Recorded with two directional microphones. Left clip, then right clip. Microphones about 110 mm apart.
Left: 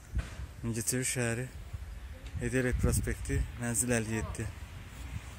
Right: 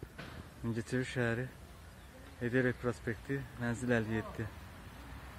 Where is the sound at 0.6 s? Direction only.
30° left (ahead or behind).